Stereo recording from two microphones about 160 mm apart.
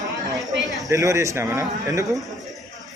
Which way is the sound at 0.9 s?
20° right (ahead or behind).